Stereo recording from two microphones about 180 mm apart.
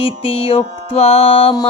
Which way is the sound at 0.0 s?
35° left (ahead or behind).